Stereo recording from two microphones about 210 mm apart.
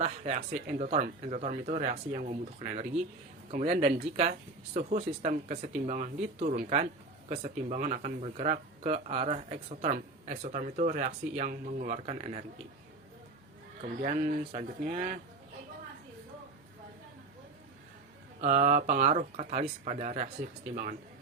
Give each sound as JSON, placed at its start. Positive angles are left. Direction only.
{"t": 0.0, "sound": "speech", "side_deg": -30}
{"t": 13.8, "sound": "speech", "side_deg": -35}
{"t": 18.3, "sound": "speech", "side_deg": -35}